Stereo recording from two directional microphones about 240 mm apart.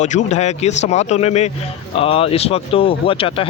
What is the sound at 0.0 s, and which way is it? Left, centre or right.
Speech, left.